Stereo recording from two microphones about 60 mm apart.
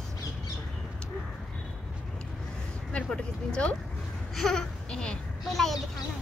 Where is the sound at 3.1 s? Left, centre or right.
Centre.